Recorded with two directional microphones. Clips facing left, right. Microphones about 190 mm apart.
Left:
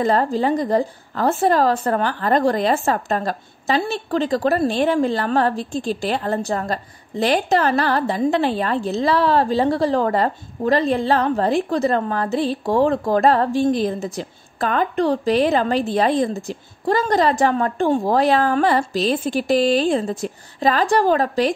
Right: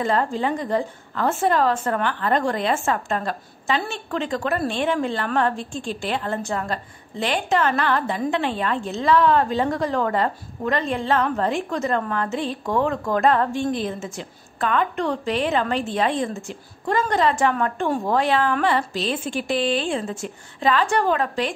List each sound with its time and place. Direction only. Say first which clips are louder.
0.0 s a woman's voice: left 4 dB; 35° left (ahead or behind)